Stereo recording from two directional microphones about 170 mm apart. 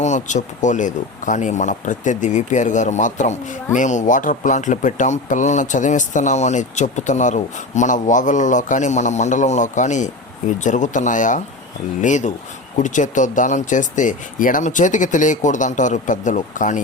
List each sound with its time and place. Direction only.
0.0 s speech: 45° left (ahead or behind)